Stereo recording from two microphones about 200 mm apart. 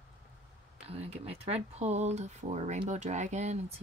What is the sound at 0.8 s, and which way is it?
Speech, 30° right (ahead or behind).